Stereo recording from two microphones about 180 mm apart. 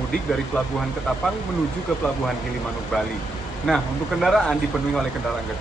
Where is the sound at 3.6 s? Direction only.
Centre (ahead or behind).